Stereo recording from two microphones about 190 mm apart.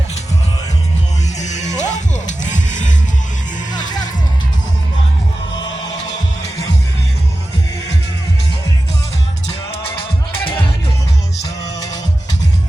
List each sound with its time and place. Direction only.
1.4 s music: 40° left (ahead or behind)
3.7 s music: 20° left (ahead or behind)